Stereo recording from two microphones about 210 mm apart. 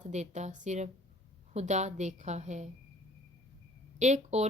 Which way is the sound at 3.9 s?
35° right (ahead or behind).